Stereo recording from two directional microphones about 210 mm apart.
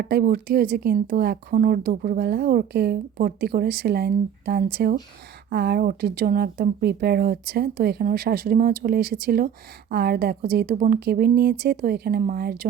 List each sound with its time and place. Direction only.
0.0 s speech: 50° right (ahead or behind)